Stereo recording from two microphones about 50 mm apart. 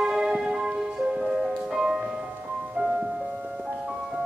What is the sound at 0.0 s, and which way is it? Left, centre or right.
Music, centre.